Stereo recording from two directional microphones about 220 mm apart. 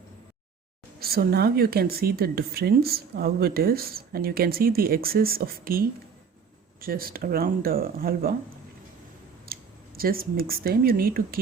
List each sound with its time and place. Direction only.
0.9 s speech: 45° right (ahead or behind)
9.5 s speech: 40° right (ahead or behind)